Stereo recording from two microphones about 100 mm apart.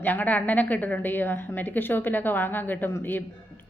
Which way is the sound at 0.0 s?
15° left (ahead or behind).